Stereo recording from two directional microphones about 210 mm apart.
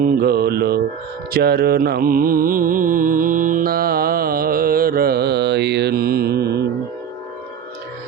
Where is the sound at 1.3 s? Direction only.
50° right (ahead or behind).